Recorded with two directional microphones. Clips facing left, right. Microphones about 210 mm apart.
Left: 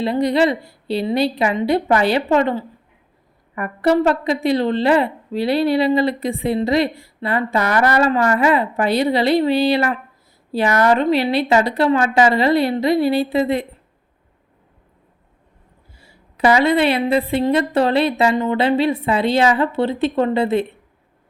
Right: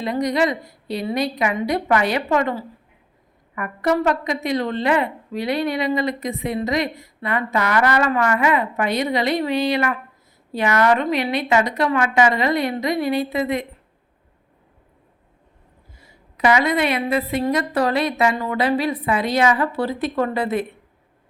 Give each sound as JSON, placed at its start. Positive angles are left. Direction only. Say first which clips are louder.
{"t": 0.0, "sound": "a woman's voice", "louder": "left 4 dB", "side_deg": 30}
{"t": 16.0, "sound": "a woman's voice", "louder": "left 3 dB", "side_deg": 30}